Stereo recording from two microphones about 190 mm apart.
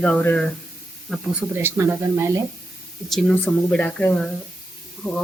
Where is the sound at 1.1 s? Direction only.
5° right (ahead or behind).